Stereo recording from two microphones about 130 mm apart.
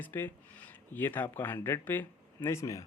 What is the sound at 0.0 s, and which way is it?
Speech, 15° left (ahead or behind).